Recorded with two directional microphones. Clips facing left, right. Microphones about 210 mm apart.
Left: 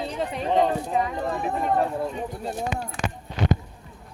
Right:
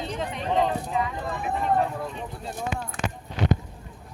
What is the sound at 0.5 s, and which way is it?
Speech, 35° left (ahead or behind).